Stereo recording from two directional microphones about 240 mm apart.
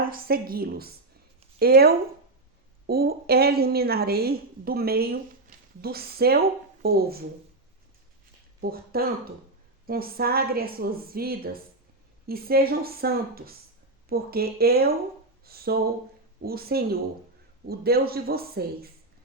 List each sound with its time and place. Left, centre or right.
0.0 s a woman's voice: right
8.6 s a woman's voice: right